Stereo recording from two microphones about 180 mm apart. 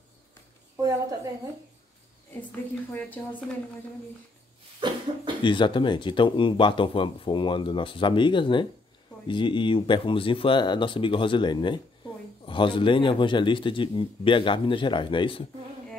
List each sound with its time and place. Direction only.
0.7 s a woman's voice: 20° right (ahead or behind)
4.7 s cough: 25° right (ahead or behind)
5.4 s speech: 25° left (ahead or behind)